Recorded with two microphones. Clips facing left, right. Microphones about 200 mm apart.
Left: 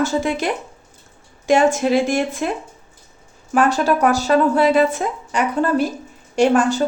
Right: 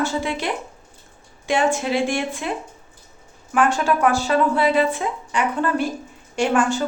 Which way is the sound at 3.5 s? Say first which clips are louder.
Left 3 dB; 35° left (ahead or behind).